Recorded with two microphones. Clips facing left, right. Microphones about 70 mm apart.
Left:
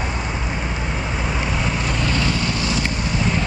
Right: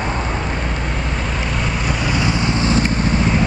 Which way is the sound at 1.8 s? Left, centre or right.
Centre.